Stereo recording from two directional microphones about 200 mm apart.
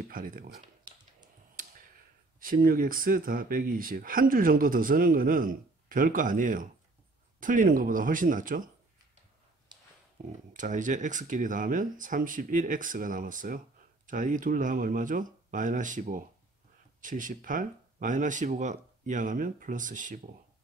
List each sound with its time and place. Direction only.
0.1 s speech: 45° right (ahead or behind)
0.6 s computer keyboard: 20° right (ahead or behind)
2.4 s speech: 45° right (ahead or behind)
9.7 s a sound: 20° right (ahead or behind)
10.5 s speech: 40° right (ahead or behind)